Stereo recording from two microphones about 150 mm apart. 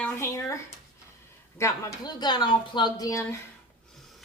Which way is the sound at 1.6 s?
25° left (ahead or behind).